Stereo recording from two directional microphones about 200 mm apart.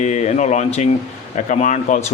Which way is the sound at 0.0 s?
35° left (ahead or behind).